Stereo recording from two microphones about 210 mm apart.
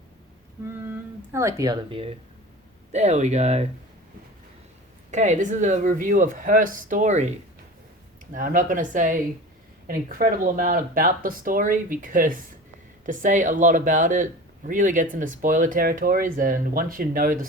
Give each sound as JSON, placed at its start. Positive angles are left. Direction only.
{"t": 0.6, "sound": "speech", "side_deg": -10}
{"t": 5.1, "sound": "speech", "side_deg": -35}
{"t": 8.3, "sound": "speech", "side_deg": -40}